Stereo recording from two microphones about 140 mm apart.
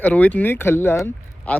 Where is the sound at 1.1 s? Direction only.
10° left (ahead or behind).